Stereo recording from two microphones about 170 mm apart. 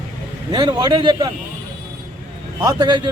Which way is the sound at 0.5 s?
25° right (ahead or behind).